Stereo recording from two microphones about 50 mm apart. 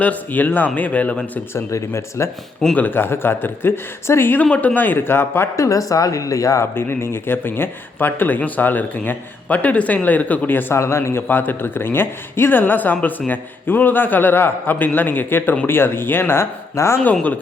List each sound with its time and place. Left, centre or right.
0.0 s speech: left
1.5 s speech: left
2.7 s speech: left
4.5 s speech: left
5.5 s a woman's voice: left
6.7 s speech: left
10.8 s speech: left
11.3 s speech: left
16.4 s speech: left